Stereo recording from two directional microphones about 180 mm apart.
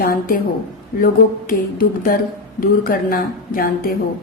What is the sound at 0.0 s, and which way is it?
A woman's voice, 50° left (ahead or behind).